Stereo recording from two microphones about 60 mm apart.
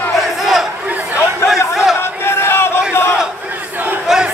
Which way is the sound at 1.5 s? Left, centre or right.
Centre.